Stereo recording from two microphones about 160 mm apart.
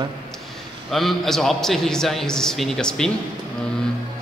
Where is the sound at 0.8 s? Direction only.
Centre (ahead or behind).